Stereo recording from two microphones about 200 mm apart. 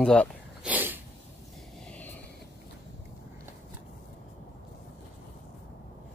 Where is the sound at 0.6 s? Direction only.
10° right (ahead or behind).